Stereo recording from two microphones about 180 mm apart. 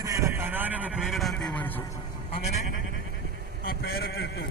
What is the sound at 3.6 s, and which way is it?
Speech, 55° left (ahead or behind).